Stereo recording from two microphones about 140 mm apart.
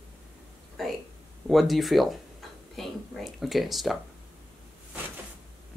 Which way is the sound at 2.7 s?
Centre (ahead or behind).